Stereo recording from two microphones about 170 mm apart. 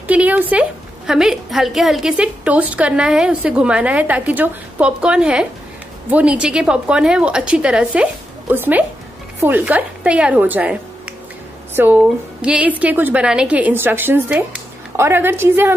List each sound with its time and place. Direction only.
0.1 s a woman's voice: 10° right (ahead or behind)